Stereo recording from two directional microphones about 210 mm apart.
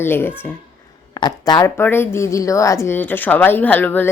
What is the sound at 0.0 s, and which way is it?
A woman's voice, 10° left (ahead or behind).